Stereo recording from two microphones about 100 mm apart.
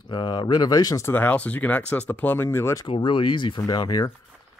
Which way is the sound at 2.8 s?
55° left (ahead or behind).